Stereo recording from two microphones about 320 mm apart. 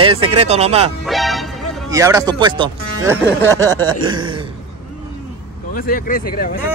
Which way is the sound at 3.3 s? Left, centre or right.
Centre.